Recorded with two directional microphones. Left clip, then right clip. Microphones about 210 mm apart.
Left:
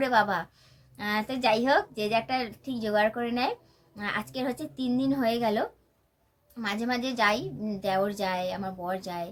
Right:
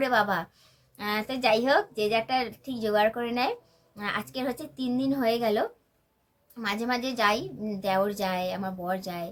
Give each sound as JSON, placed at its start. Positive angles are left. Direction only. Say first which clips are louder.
{"t": 0.0, "sound": "a woman's voice", "louder": "even", "side_deg": 0}